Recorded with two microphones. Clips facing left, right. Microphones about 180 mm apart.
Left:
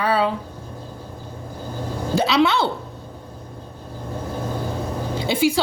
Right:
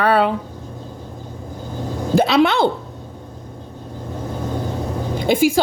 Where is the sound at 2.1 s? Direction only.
55° right (ahead or behind).